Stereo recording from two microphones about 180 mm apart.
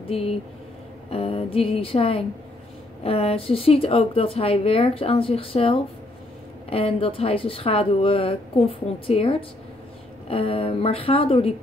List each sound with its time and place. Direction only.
0.0 s a woman's voice: 35° left (ahead or behind)